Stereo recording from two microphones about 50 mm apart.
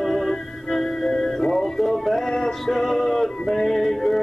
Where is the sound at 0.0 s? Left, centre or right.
Centre.